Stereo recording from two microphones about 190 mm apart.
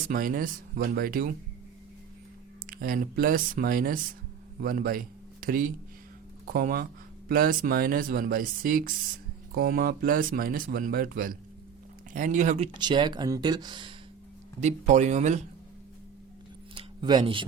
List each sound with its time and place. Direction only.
0.0 s speech: 45° right (ahead or behind)
2.6 s speech: 50° right (ahead or behind); by 13.9 s 25° right (ahead or behind)
14.6 s speech: 35° right (ahead or behind)
16.7 s a sound: 25° right (ahead or behind)